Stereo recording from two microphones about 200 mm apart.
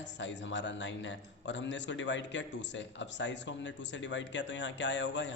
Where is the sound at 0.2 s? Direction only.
65° left (ahead or behind).